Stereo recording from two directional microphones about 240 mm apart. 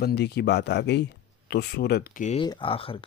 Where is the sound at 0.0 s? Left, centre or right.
Left.